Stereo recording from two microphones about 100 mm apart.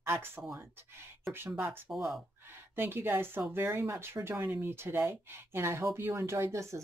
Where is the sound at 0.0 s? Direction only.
25° right (ahead or behind).